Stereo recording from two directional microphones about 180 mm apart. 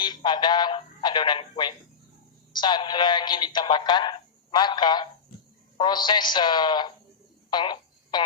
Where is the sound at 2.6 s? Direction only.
25° left (ahead or behind).